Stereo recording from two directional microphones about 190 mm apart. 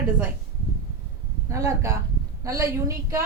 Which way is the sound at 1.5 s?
15° right (ahead or behind).